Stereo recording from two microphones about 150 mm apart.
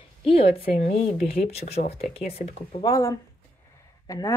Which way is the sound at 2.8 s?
25° left (ahead or behind).